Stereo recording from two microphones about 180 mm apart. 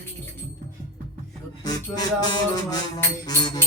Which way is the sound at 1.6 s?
20° left (ahead or behind).